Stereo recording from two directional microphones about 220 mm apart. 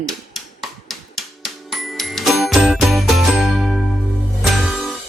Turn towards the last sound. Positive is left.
turn(degrees=0)  # may be behind; listen again after turning